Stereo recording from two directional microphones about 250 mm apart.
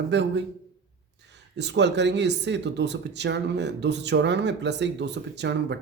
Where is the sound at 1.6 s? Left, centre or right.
Right.